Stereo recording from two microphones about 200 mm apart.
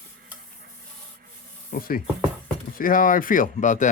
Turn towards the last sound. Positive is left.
turn(degrees=40)  # may be behind; listen again after turning